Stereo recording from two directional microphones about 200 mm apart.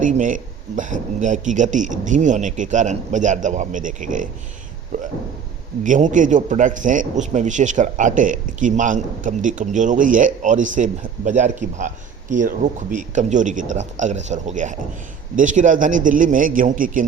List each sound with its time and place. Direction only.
0.0 s speech: 40° right (ahead or behind)
5.8 s speech: 40° right (ahead or behind)